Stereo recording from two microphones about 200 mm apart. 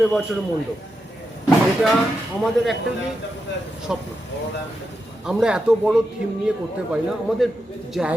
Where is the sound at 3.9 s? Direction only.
5° right (ahead or behind).